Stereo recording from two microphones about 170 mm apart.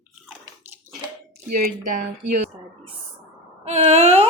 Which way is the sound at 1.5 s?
55° right (ahead or behind).